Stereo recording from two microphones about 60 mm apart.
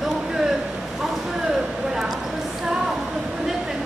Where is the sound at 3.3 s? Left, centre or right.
Centre.